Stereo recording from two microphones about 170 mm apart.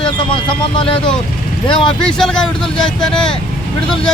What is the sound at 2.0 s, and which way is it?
Speech, 5° left (ahead or behind).